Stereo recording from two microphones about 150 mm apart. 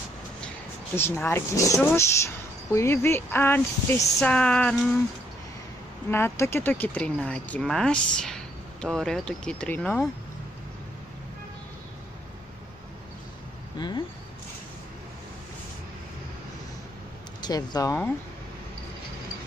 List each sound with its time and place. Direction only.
0.9 s speech: 15° left (ahead or behind)
6.0 s speech: 15° left (ahead or behind)
13.7 s a sound: 30° left (ahead or behind)
17.4 s speech: 25° left (ahead or behind)